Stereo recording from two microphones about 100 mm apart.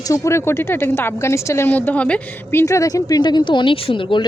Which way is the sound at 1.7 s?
15° left (ahead or behind).